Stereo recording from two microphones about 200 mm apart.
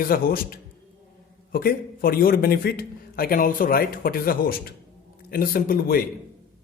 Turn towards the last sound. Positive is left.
turn(degrees=45)  # may be behind; listen again after turning